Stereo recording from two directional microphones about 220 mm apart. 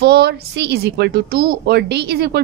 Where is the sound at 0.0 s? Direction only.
50° right (ahead or behind).